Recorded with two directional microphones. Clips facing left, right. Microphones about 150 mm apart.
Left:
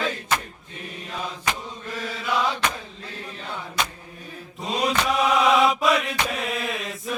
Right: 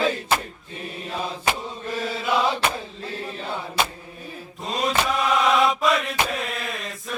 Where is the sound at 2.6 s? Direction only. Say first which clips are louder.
Right 3 dB; 30° right (ahead or behind).